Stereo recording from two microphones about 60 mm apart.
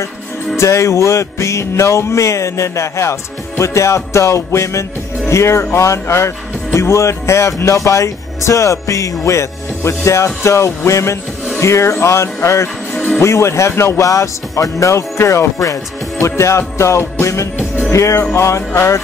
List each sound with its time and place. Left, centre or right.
0.6 s music: left
5.3 s speech: left
17.9 s music: left
18.3 s speech: left